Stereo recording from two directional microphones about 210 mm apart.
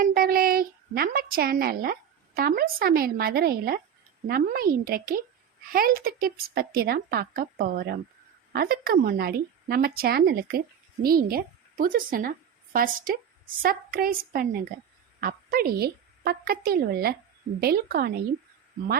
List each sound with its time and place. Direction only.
0.0 s a woman's voice: 45° right (ahead or behind)